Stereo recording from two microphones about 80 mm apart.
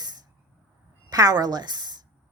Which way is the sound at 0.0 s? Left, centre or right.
Right.